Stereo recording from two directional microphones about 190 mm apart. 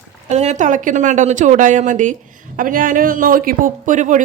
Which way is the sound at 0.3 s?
35° right (ahead or behind).